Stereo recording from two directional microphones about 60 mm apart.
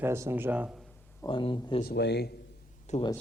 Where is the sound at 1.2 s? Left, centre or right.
Left.